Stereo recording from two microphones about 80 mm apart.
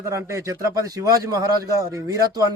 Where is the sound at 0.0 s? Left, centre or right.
Right.